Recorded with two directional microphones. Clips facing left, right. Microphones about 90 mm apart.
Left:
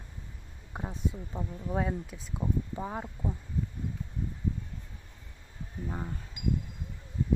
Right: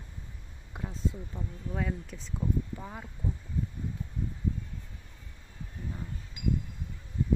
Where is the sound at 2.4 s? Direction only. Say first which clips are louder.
Left 1 dB; 30° left (ahead or behind).